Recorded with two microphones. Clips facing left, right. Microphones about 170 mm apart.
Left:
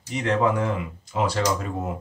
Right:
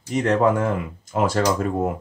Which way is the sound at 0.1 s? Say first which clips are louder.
Right 4 dB; 45° right (ahead or behind).